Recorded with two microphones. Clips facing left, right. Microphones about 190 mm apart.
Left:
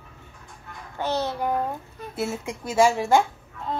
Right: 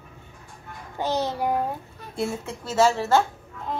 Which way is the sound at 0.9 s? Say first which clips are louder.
Right 1 dB; 15° right (ahead or behind).